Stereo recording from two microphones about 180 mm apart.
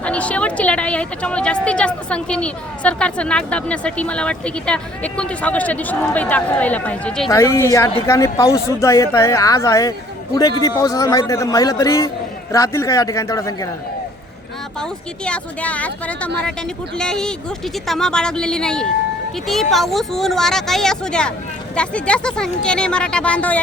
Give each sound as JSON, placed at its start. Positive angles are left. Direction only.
{"t": 0.0, "sound": "a woman's voice", "side_deg": 5}
{"t": 14.8, "sound": "a woman's voice", "side_deg": 5}